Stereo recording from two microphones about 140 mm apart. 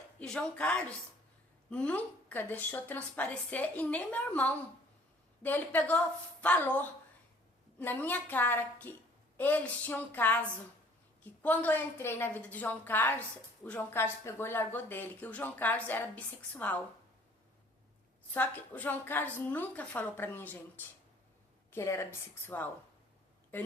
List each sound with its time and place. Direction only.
0.2 s speech: 5° left (ahead or behind)
18.3 s speech: 10° left (ahead or behind)